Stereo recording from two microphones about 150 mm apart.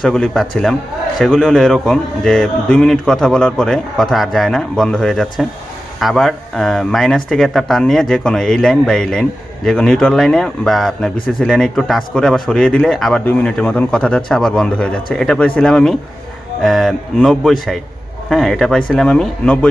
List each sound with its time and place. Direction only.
0.0 s speech: 5° left (ahead or behind)